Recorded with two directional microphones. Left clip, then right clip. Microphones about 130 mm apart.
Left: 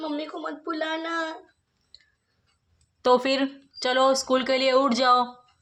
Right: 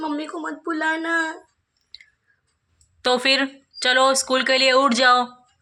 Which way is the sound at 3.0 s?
20° left (ahead or behind).